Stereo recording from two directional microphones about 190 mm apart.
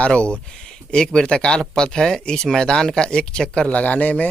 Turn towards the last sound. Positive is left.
turn(degrees=5)  # may be behind; listen again after turning